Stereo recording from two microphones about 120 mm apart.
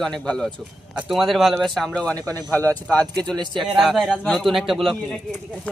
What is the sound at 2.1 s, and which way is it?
Speech, 30° right (ahead or behind).